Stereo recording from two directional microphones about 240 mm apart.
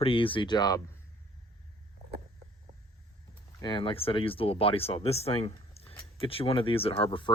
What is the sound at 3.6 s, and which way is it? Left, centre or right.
Speech, left.